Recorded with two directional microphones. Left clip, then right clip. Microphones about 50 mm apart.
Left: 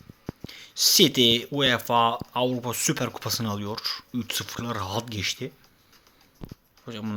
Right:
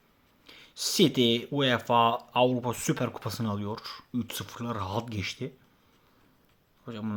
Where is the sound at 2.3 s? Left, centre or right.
Centre.